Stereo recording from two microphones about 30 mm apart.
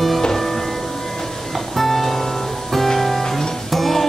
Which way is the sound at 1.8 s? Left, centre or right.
Centre.